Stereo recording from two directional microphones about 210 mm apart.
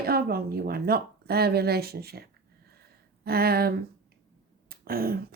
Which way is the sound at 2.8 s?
45° right (ahead or behind).